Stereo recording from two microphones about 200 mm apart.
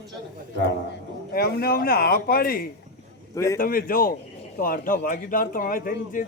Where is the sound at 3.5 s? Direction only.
45° left (ahead or behind).